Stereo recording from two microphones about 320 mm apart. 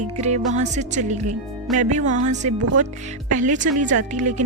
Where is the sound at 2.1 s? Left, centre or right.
Right.